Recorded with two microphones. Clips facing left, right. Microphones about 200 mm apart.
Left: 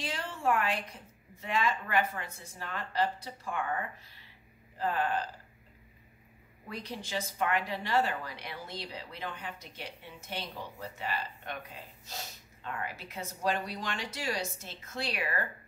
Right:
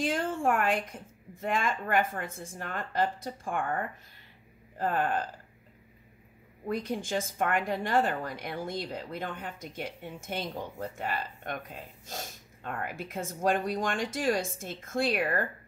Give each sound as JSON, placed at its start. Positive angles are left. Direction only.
{"t": 0.0, "sound": "a woman's voice", "side_deg": -50}
{"t": 6.6, "sound": "a woman's voice", "side_deg": -50}